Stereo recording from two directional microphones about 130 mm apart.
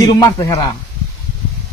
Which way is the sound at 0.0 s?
25° left (ahead or behind).